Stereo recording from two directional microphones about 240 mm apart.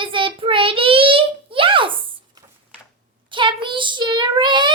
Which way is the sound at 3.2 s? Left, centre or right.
Right.